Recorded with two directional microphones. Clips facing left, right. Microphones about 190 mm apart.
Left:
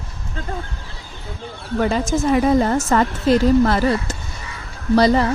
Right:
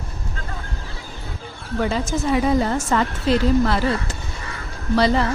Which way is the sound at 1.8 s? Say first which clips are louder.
Left 3 dB; 50° left (ahead or behind).